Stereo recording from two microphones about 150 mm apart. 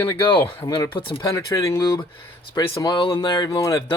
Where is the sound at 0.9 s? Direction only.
35° left (ahead or behind).